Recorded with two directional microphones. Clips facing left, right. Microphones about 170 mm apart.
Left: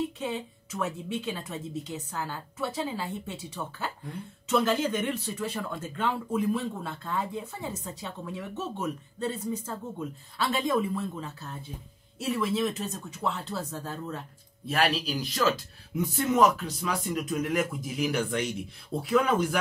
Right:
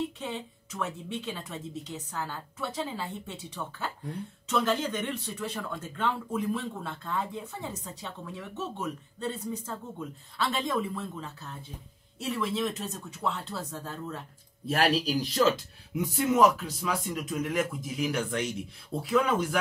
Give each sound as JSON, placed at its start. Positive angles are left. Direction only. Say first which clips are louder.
{"t": 0.2, "sound": "speech", "louder": "left 3 dB", "side_deg": 5}
{"t": 14.7, "sound": "speech", "louder": "right 1 dB", "side_deg": -35}
{"t": 15.9, "sound": "speech", "louder": "even", "side_deg": -10}